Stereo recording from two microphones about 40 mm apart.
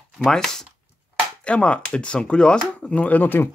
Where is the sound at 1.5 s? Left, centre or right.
Left.